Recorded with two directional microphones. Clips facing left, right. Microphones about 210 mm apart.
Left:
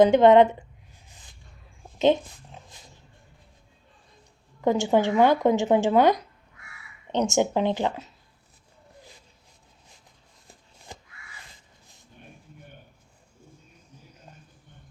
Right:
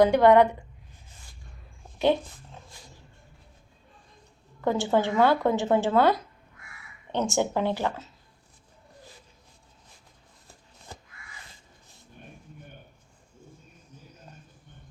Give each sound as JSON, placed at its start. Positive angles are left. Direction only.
{"t": 0.0, "sound": "a woman's voice", "side_deg": 20}
{"t": 2.0, "sound": "speech", "side_deg": 20}
{"t": 4.6, "sound": "speech", "side_deg": 15}